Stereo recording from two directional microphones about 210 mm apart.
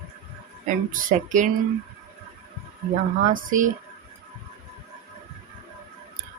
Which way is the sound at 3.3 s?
40° right (ahead or behind).